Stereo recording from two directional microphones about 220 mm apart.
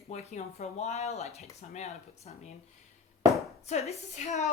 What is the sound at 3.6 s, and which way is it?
Speech, 30° left (ahead or behind).